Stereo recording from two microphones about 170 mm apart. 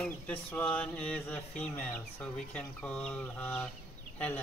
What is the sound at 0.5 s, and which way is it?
Speech, 5° left (ahead or behind).